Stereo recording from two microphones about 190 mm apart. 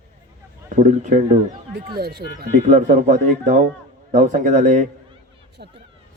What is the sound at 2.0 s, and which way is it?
Speech, 55° right (ahead or behind).